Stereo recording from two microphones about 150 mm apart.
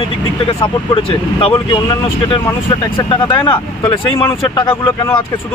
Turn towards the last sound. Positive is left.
turn(degrees=35)  # may be behind; listen again after turning